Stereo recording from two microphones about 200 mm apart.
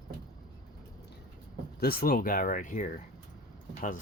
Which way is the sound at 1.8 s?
45° left (ahead or behind).